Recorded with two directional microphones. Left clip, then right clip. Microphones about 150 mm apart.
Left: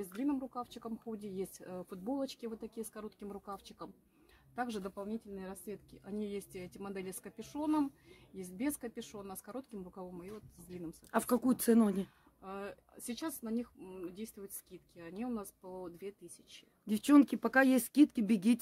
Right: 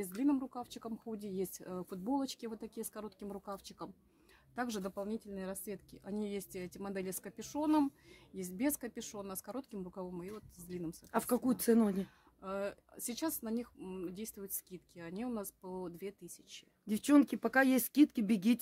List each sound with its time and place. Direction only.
0.0 s speech: 65° right (ahead or behind)
11.1 s speech: 10° left (ahead or behind)
12.4 s speech: 65° right (ahead or behind)
16.8 s speech: 5° left (ahead or behind)